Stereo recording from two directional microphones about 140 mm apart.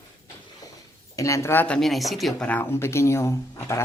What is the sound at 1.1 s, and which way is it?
Speech, 20° left (ahead or behind).